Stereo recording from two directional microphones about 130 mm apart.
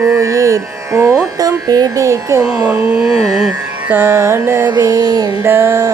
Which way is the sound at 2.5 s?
10° right (ahead or behind).